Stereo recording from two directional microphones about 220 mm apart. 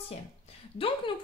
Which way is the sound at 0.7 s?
25° left (ahead or behind).